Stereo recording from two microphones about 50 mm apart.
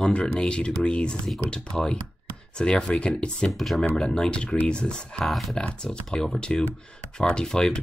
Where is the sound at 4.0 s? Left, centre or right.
Centre.